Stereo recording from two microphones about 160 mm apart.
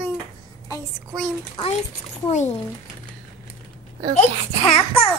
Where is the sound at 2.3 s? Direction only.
45° left (ahead or behind).